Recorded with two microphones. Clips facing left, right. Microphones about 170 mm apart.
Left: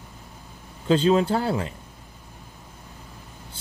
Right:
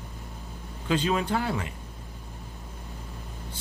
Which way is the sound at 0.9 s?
30° left (ahead or behind).